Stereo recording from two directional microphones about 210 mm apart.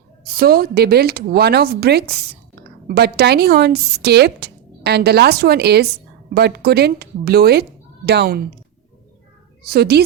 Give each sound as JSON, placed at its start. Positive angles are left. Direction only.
{"t": 0.3, "sound": "speech", "side_deg": -45}
{"t": 9.6, "sound": "speech", "side_deg": -50}